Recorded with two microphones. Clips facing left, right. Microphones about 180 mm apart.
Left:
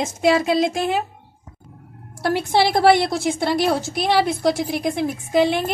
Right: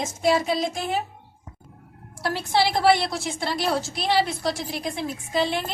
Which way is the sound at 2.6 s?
55° left (ahead or behind).